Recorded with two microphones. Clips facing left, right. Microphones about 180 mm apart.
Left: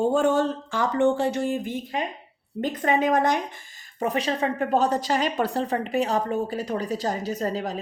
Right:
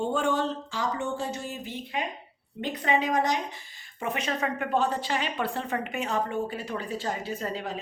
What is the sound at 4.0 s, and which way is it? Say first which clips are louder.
Speech: left 5 dB; 35° left (ahead or behind).